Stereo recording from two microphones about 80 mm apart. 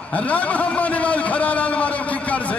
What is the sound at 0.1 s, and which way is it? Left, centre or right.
A man's voice, centre.